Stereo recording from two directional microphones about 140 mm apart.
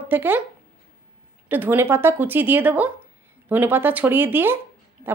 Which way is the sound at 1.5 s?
15° right (ahead or behind).